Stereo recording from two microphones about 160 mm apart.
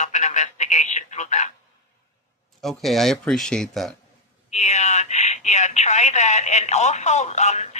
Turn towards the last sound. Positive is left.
turn(degrees=45)  # may be behind; listen again after turning